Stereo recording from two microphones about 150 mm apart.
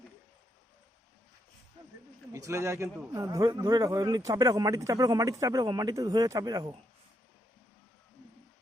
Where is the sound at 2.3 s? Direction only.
20° right (ahead or behind).